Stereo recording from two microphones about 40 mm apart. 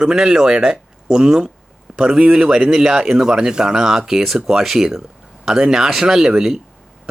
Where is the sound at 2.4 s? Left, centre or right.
Centre.